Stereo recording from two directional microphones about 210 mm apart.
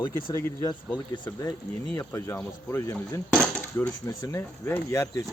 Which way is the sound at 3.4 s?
5° left (ahead or behind).